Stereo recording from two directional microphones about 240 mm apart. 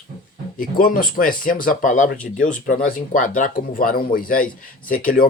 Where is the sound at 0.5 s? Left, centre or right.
Left.